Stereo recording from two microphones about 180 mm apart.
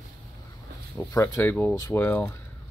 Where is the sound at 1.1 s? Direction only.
15° left (ahead or behind).